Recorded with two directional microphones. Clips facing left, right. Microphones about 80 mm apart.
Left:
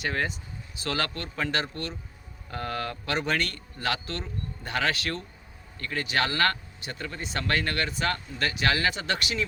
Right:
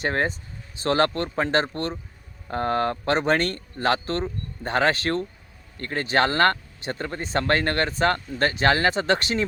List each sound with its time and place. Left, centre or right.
0.0 s speech: right